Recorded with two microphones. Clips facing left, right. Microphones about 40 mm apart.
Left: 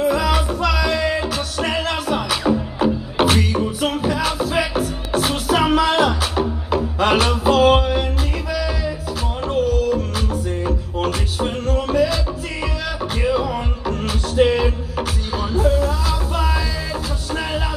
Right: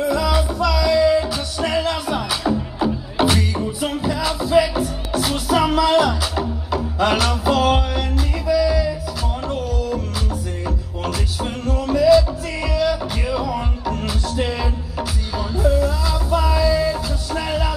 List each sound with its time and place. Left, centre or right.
0.1 s music: left
8.5 s music: left